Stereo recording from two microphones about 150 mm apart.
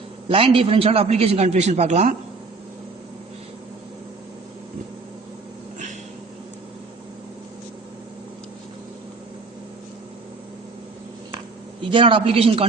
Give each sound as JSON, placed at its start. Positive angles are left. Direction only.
{"t": 0.3, "sound": "a man's voice", "side_deg": -40}
{"t": 11.9, "sound": "a woman's voice", "side_deg": -35}